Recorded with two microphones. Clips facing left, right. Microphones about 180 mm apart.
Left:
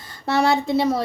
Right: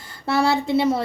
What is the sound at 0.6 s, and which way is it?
Speech, 25° right (ahead or behind).